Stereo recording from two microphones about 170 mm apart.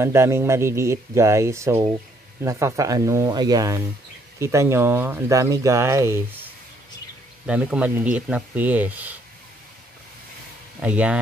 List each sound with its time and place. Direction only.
0.0 s speech: 15° right (ahead or behind)
10.8 s speech: 10° right (ahead or behind)